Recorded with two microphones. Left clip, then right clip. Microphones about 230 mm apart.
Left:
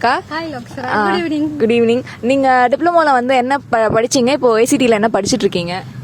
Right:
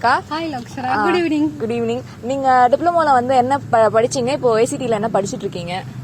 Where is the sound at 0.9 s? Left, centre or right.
Left.